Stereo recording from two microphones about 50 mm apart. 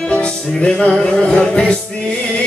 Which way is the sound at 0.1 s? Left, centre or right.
Centre.